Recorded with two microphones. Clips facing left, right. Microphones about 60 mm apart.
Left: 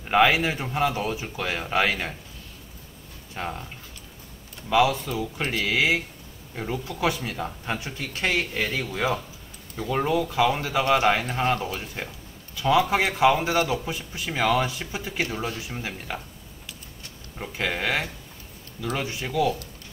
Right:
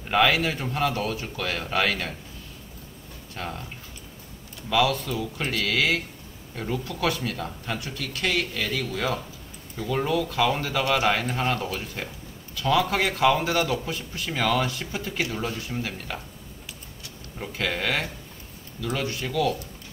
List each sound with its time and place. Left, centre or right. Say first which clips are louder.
0.1 s a man's voice: left 2 dB; centre
3.3 s a man's voice: left 2 dB; centre
4.6 s a man's voice: left 2 dB; centre
17.4 s a man's voice: even; centre